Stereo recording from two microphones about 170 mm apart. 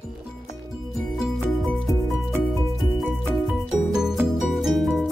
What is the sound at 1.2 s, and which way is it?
Music, 5° right (ahead or behind).